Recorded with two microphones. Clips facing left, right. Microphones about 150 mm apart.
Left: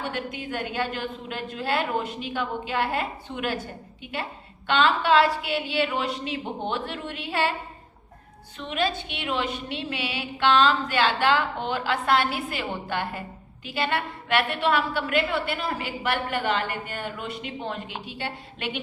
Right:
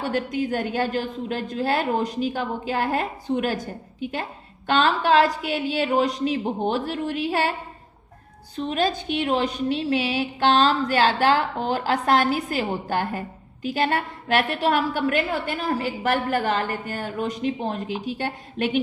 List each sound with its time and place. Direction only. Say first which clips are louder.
0.0 s a woman's voice: right 7 dB; 40° right (ahead or behind)
8.5 s a woman's voice: right 4 dB; 40° right (ahead or behind)